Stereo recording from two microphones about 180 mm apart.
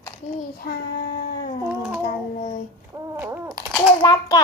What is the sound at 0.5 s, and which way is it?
Child singing, 60° left (ahead or behind).